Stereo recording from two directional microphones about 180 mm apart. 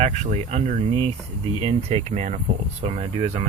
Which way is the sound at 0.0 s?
40° right (ahead or behind).